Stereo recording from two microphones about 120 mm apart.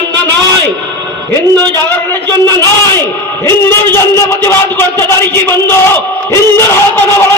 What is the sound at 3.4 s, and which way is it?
A man's voice, 20° left (ahead or behind).